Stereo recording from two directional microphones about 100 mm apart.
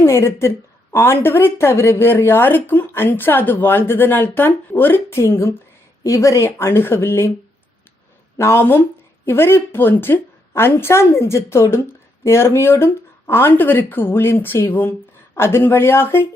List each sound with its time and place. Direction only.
0.0 s a woman's voice: 25° left (ahead or behind)
8.4 s a woman's voice: 25° left (ahead or behind)